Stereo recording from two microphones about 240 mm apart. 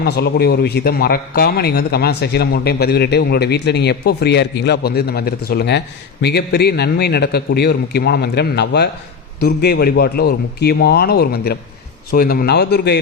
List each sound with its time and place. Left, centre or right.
0.0 s a man's voice: left